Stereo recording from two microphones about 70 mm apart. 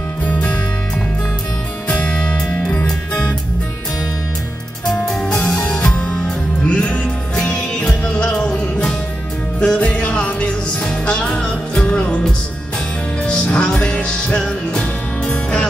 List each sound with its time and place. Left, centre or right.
0.2 s music: left
1.9 s music: centre
4.8 s music: centre